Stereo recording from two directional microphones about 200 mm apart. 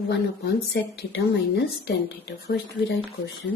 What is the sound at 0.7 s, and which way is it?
A woman's voice, 55° left (ahead or behind).